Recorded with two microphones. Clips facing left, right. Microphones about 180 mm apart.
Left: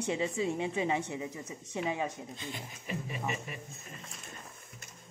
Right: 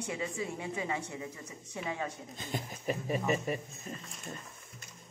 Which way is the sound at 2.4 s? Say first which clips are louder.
Right 3 dB; 45° right (ahead or behind).